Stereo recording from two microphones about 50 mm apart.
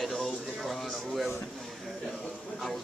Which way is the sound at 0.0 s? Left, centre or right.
Centre.